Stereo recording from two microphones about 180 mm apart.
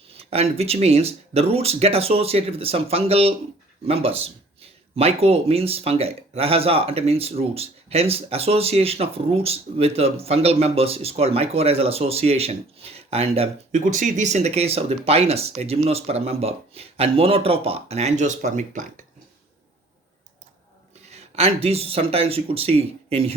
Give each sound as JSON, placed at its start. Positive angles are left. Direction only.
{"t": 0.2, "sound": "speech", "side_deg": -35}
{"t": 21.1, "sound": "speech", "side_deg": -35}